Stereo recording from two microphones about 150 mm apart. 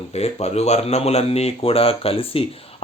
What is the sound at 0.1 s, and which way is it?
Speech, 45° left (ahead or behind).